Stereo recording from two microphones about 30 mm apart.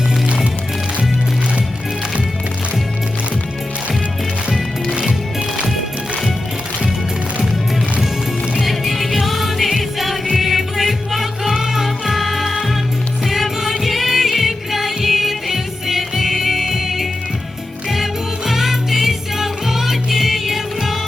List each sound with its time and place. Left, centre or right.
8.6 s music: centre